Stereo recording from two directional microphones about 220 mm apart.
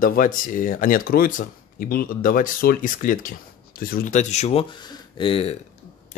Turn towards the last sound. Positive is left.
turn(degrees=25)  # may be behind; listen again after turning